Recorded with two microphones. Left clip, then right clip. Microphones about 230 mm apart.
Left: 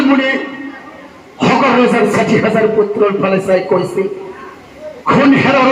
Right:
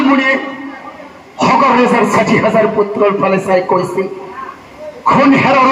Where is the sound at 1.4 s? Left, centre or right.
Right.